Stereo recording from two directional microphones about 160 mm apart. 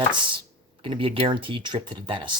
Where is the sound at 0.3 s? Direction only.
30° right (ahead or behind).